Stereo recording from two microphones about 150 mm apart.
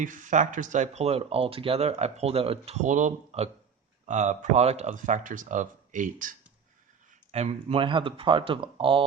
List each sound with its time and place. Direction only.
0.0 s speech: 60° right (ahead or behind)
7.3 s speech: 45° right (ahead or behind)